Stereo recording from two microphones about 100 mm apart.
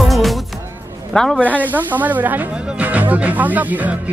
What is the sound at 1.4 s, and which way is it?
Speech, 15° right (ahead or behind).